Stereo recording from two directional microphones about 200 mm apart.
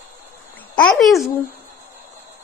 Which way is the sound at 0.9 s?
Centre (ahead or behind).